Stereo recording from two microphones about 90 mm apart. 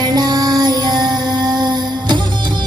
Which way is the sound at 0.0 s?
50° right (ahead or behind).